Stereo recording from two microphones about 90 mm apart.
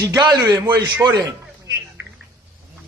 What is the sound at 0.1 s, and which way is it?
Speech, 40° right (ahead or behind).